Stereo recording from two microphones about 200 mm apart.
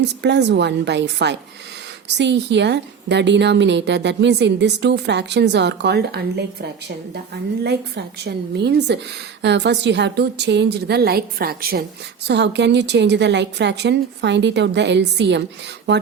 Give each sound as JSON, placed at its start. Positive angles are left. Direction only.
{"t": 0.0, "sound": "a woman's voice", "side_deg": -60}